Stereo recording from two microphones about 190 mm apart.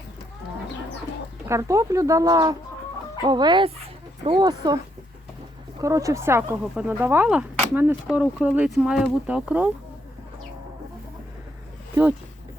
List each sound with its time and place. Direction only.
1.5 s speech: 15° right (ahead or behind)
5.8 s speech: 15° right (ahead or behind)